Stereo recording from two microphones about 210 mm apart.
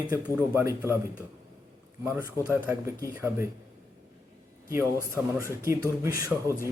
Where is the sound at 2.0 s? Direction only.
10° right (ahead or behind).